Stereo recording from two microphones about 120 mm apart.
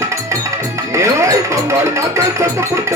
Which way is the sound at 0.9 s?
25° right (ahead or behind).